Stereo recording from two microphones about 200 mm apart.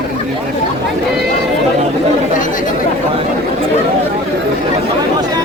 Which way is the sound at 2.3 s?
40° left (ahead or behind).